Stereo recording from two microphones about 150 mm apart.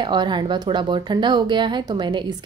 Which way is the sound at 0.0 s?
30° right (ahead or behind).